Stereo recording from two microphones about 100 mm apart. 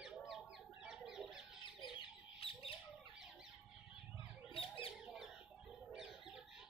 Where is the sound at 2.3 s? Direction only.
70° left (ahead or behind).